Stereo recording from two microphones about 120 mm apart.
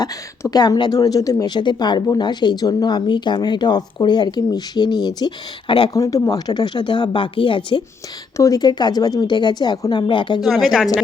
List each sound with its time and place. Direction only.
0.5 s speech: 35° left (ahead or behind)
5.9 s speech: 30° left (ahead or behind); by 7.8 s 45° left (ahead or behind)
8.4 s speech: 30° left (ahead or behind)
10.4 s speech: centre (ahead or behind)